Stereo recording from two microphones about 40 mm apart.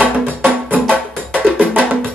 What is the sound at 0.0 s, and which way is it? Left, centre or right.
Music, right.